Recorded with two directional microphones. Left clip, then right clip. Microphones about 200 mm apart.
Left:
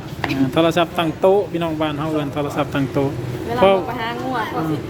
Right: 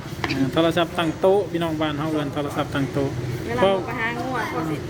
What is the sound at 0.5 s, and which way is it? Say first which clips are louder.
Speech: left 4 dB; 10° left (ahead or behind).